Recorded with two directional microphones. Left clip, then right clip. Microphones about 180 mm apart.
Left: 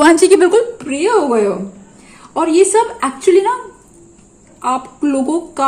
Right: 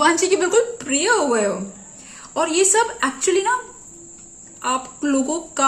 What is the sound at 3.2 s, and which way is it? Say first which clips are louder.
Speech: left 9 dB; 30° left (ahead or behind).